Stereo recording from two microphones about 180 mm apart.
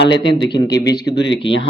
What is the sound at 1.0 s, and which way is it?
Speech, 80° left.